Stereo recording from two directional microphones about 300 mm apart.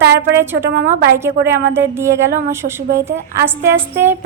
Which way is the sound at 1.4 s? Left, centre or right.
Centre.